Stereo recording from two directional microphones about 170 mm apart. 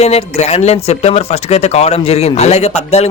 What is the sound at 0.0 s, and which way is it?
A man's voice, 40° left (ahead or behind).